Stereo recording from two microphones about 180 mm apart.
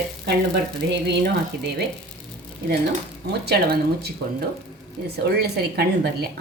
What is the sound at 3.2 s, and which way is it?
A woman's voice, 60° right (ahead or behind).